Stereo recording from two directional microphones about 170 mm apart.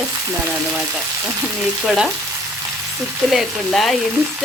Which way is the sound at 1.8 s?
Centre (ahead or behind).